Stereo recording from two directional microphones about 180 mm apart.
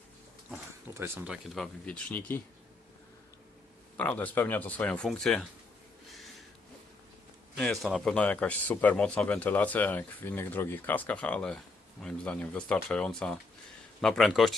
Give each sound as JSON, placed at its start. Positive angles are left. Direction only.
{"t": 0.5, "sound": "speech", "side_deg": -15}
{"t": 3.9, "sound": "a man's voice", "side_deg": 10}
{"t": 6.1, "sound": "a sound", "side_deg": 0}
{"t": 7.5, "sound": "a man's voice", "side_deg": 0}